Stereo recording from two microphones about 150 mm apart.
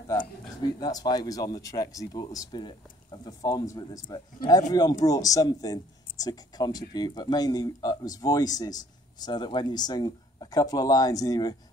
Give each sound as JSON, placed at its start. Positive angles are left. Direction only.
{"t": 0.7, "sound": "a man's voice", "side_deg": 25}